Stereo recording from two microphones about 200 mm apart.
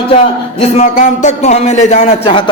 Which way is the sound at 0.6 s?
35° left (ahead or behind).